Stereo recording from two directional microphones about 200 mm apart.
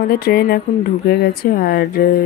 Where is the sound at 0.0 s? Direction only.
50° left (ahead or behind).